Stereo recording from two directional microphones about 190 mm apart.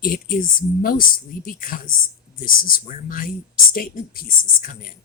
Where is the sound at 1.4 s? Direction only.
50° left (ahead or behind).